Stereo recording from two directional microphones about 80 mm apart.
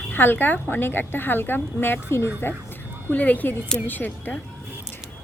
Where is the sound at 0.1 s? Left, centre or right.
Left.